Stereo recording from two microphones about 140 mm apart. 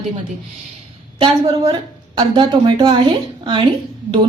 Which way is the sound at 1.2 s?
35° right (ahead or behind).